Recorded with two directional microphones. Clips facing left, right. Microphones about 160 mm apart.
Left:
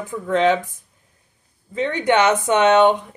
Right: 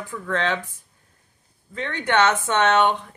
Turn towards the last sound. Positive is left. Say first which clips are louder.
# left 5 dB
turn(degrees=15)  # may be behind; listen again after turning